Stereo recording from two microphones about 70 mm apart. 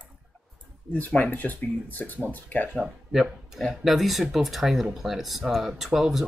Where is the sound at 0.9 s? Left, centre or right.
Left.